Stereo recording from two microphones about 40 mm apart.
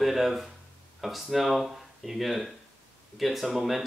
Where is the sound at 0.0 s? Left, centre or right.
Centre.